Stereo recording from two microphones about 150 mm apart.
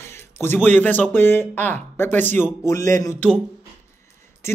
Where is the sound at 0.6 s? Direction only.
10° left (ahead or behind).